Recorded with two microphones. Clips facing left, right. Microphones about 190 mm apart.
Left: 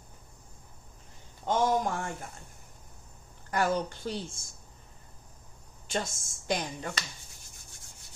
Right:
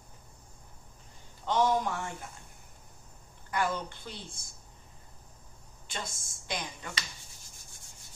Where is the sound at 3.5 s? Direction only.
45° left (ahead or behind).